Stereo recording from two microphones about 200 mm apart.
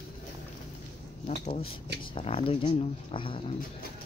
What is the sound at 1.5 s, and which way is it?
Speech, 30° left (ahead or behind).